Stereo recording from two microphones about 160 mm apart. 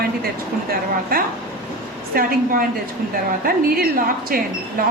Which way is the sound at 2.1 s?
65° right (ahead or behind).